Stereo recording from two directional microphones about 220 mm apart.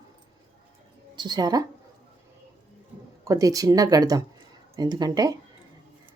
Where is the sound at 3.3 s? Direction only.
15° right (ahead or behind).